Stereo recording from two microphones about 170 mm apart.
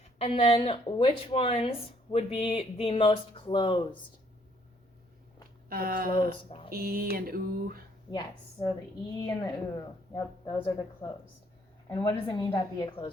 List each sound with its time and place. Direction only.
0.2 s speech: 35° left (ahead or behind)
5.6 s speech: 60° right (ahead or behind)
6.7 s mantra: 60° right (ahead or behind)
9.1 s a woman's voice: 20° left (ahead or behind)